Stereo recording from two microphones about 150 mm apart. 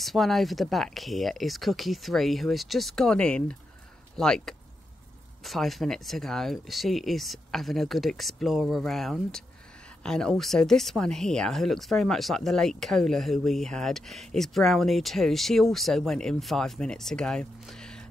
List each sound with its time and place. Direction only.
0.0 s speech: centre (ahead or behind)